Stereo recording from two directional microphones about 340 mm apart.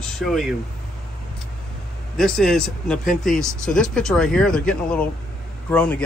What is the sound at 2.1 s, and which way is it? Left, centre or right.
Speech, centre.